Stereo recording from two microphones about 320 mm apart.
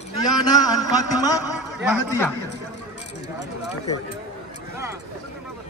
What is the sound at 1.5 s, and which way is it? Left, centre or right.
Speech, centre.